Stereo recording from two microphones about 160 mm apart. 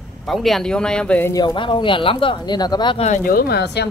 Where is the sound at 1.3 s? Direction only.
25° left (ahead or behind).